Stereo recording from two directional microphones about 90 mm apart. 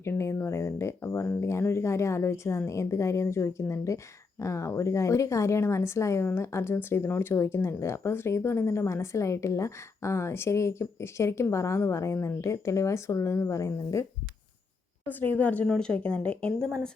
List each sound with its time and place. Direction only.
0.0 s speech: 30° left (ahead or behind)
15.0 s a woman's voice: 20° left (ahead or behind)